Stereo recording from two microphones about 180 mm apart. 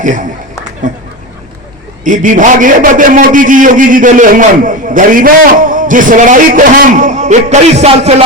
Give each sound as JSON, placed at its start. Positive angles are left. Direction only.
{"t": 0.0, "sound": "a man's voice", "side_deg": -45}
{"t": 2.0, "sound": "a man's voice", "side_deg": -45}